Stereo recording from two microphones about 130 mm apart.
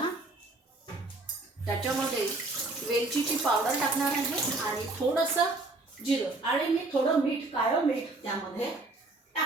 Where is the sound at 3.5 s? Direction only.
5° left (ahead or behind).